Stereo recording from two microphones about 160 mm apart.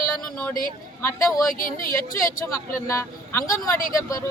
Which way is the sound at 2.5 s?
15° left (ahead or behind).